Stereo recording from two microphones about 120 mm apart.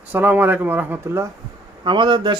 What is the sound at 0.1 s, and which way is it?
Speech, 15° right (ahead or behind).